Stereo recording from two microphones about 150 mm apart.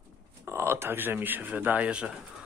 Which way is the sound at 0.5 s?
20° right (ahead or behind).